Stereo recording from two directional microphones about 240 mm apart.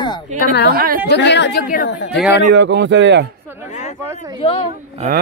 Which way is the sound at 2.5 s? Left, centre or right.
Right.